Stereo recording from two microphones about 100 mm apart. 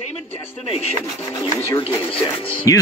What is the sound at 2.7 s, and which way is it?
Speech, 35° left (ahead or behind).